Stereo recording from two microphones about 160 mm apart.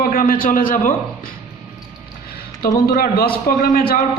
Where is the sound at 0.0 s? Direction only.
60° left (ahead or behind).